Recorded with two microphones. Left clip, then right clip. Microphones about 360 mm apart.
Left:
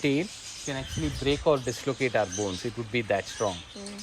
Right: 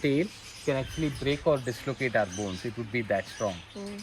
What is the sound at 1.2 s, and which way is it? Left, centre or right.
Speech, centre.